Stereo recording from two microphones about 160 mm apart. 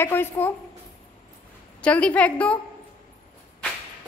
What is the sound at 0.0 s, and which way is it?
Speech, 15° left (ahead or behind).